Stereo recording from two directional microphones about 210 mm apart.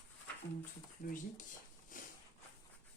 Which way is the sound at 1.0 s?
40° left (ahead or behind).